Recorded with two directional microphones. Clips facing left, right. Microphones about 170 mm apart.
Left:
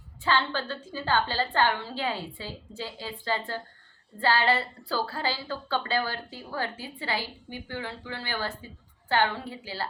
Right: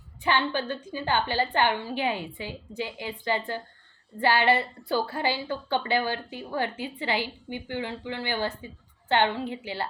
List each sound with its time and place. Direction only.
0.2 s a woman's voice: 20° right (ahead or behind)